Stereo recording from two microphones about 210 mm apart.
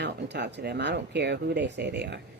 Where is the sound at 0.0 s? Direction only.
55° right (ahead or behind).